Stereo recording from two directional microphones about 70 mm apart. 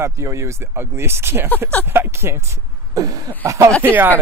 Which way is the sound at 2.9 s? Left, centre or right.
Right.